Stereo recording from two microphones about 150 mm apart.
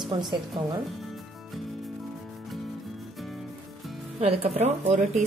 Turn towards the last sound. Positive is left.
turn(degrees=-45)  # may be behind; listen again after turning